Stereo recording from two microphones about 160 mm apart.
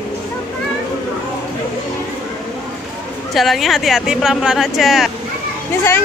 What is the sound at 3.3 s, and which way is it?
A woman's voice, centre (ahead or behind).